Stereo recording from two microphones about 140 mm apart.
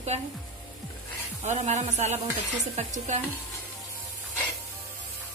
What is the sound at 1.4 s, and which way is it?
Speech, 55° right (ahead or behind).